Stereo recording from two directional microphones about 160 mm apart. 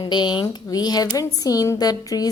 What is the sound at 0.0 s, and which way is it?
Speech, 30° left (ahead or behind).